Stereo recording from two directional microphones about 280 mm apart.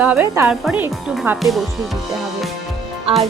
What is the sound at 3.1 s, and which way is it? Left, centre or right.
Speech, centre.